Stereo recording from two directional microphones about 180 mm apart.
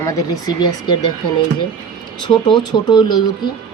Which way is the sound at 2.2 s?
25° left (ahead or behind).